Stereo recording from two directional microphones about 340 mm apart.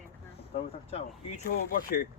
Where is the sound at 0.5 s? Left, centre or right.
Centre.